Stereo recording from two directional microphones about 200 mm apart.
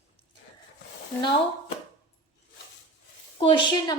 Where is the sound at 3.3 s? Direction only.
25° left (ahead or behind).